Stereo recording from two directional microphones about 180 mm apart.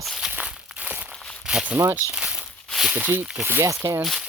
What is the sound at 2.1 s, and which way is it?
Speech, 5° right (ahead or behind).